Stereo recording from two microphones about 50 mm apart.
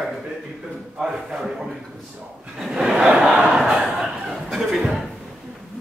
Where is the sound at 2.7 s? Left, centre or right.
Centre.